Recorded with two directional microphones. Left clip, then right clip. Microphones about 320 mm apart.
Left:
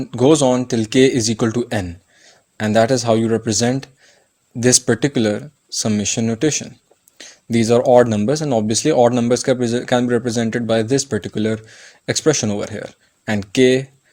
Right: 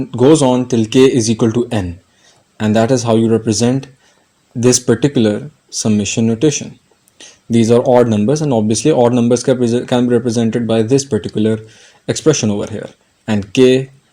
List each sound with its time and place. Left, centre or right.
0.0 s speech: left